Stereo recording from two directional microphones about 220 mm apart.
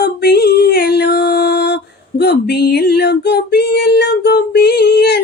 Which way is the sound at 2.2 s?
50° left (ahead or behind).